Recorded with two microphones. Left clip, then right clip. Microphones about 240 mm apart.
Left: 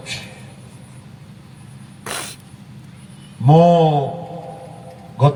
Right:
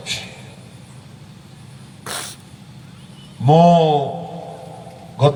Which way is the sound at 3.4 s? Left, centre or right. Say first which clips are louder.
Even; right.